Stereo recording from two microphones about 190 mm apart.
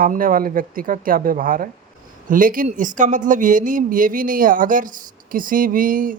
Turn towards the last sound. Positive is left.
turn(degrees=-45)  # may be behind; listen again after turning